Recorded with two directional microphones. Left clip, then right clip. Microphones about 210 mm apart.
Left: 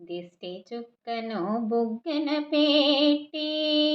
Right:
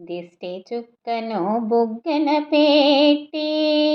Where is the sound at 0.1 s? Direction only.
5° right (ahead or behind).